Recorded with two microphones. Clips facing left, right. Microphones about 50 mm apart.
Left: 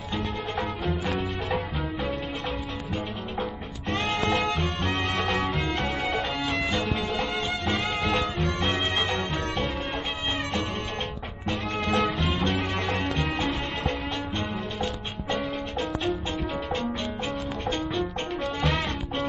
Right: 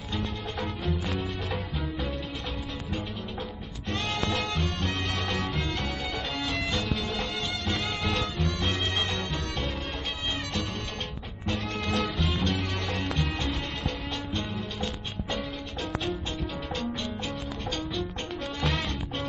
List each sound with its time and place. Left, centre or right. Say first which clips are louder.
3.9 s music: left 4 dB; left
4.4 s music: left 4 dB; centre
6.7 s music: left 3 dB; centre
8.1 s music: left 3 dB; centre
11.9 s music: left 4 dB; centre
12.3 s music: left 3 dB; left
17.6 s music: left 4 dB; left